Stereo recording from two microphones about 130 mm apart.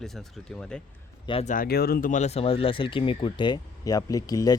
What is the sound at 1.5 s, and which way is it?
Speech, 85° left.